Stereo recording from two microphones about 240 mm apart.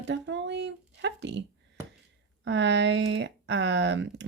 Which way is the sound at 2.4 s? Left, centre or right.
Right.